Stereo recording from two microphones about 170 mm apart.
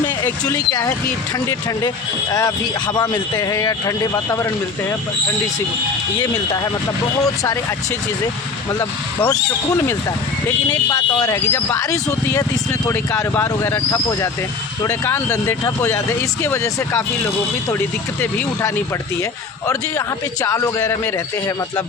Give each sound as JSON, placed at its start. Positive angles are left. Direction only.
{"t": 0.4, "sound": "speech", "side_deg": 20}
{"t": 2.3, "sound": "speech", "side_deg": 20}
{"t": 7.2, "sound": "speech", "side_deg": 20}
{"t": 8.8, "sound": "speech", "side_deg": 20}
{"t": 20.4, "sound": "speech", "side_deg": 20}